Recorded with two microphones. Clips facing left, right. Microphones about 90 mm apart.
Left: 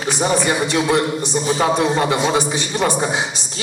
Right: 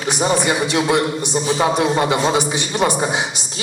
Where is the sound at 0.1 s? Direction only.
20° right (ahead or behind).